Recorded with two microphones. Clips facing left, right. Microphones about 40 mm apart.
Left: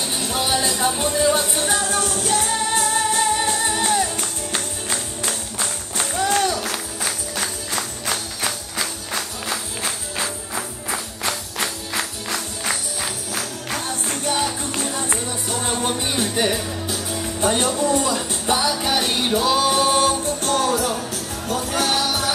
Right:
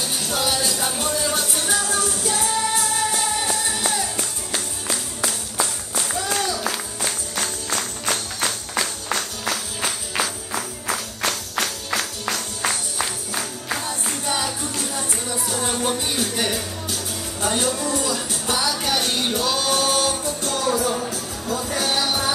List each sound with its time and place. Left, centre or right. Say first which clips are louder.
0.2 s music: left 2 dB; centre
1.7 s music: left 1 dB; left
5.9 s music: left 4 dB; left
7.7 s music: right 2 dB; centre
11.2 s music: right 1 dB; left
13.8 s music: left 2 dB; left
14.9 s music: left 2 dB; left
15.6 s music: left 1 dB; centre
17.4 s music: left 3 dB; left
18.6 s music: left 2 dB; centre
20.2 s music: left 3 dB; left